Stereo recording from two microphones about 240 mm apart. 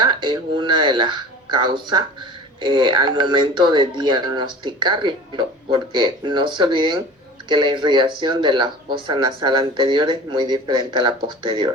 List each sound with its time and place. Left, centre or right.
0.0 s speech: centre